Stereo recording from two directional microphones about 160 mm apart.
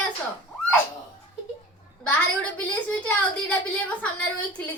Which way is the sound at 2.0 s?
10° left (ahead or behind).